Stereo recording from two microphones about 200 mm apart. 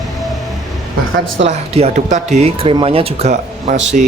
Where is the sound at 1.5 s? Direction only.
35° right (ahead or behind).